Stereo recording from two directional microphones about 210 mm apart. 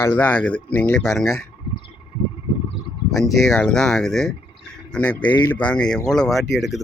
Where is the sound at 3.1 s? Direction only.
Centre (ahead or behind).